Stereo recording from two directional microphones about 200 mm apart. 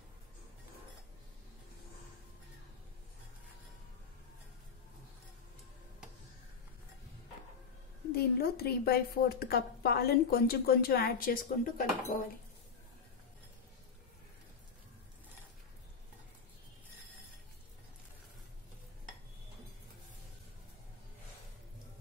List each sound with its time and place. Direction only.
8.1 s a woman's voice: 50° left (ahead or behind)